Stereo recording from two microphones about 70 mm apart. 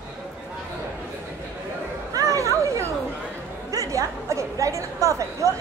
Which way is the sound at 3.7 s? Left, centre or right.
Right.